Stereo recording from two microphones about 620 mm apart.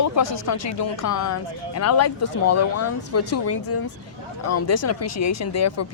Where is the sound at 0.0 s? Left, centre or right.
Left.